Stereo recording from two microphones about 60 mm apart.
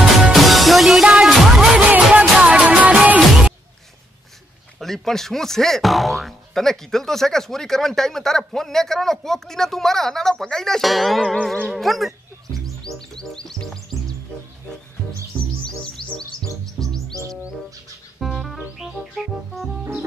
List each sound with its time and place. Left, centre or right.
0.3 s music: centre
1.9 s music: right
4.7 s speech: centre
12.5 s music: centre
15.6 s music: centre
16.8 s chirp: centre
18.2 s music: centre